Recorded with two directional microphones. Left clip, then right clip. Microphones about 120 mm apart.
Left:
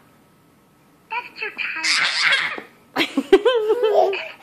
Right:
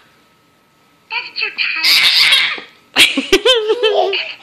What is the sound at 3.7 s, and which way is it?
Baby laughter, 5° right (ahead or behind).